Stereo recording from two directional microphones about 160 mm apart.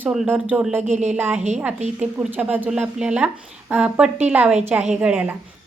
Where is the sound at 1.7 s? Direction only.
45° right (ahead or behind).